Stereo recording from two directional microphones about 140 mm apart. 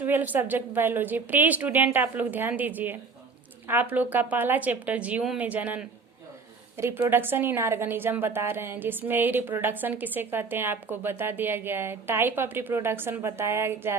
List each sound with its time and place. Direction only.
0.0 s a woman's voice: 15° right (ahead or behind)